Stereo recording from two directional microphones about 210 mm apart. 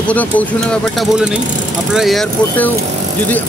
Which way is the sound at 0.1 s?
5° left (ahead or behind).